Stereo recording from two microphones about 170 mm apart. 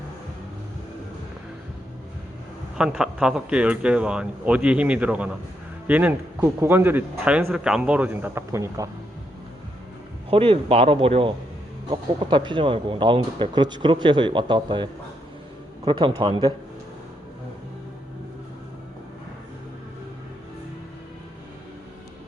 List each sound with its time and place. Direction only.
2.7 s speech: 5° right (ahead or behind)
10.2 s speech: 35° right (ahead or behind)